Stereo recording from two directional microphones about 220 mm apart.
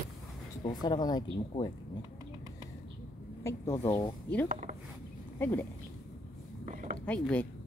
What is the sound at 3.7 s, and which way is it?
Speech, 10° left (ahead or behind).